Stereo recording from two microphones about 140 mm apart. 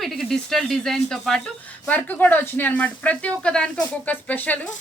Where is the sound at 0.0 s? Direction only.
Centre (ahead or behind).